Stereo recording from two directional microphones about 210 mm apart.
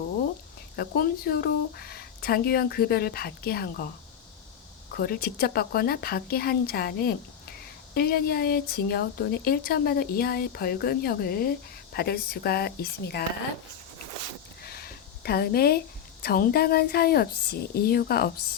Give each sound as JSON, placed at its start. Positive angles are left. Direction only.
{"t": 0.8, "sound": "speech", "side_deg": 45}
{"t": 4.9, "sound": "speech", "side_deg": 45}
{"t": 14.6, "sound": "a sound", "side_deg": 50}
{"t": 16.2, "sound": "speech", "side_deg": 45}